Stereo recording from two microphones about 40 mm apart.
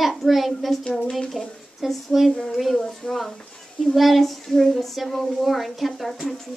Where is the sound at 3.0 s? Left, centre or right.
Centre.